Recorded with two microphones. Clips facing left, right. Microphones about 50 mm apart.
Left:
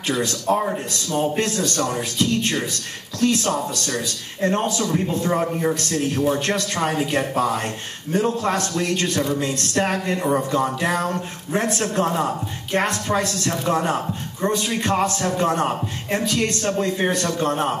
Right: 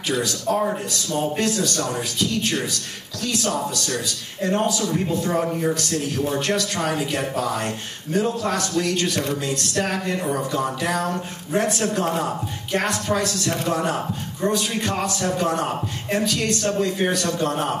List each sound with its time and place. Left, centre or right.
0.1 s a man's voice: left
0.6 s a man's voice: centre
1.4 s a man's voice: left
5.3 s speech: centre
5.8 s a man's voice: left
13.5 s a man's voice: left
14.4 s a man's voice: left